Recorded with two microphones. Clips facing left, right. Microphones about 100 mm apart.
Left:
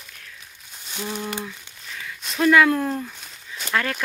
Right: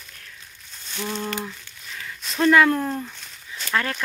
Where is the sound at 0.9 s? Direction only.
15° left (ahead or behind).